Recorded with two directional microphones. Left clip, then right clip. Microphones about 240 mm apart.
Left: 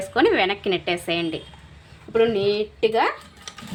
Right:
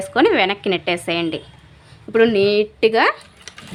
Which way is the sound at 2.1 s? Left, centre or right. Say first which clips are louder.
Right 5 dB; right.